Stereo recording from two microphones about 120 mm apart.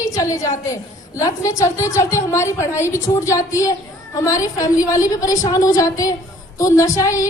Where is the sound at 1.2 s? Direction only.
25° left (ahead or behind).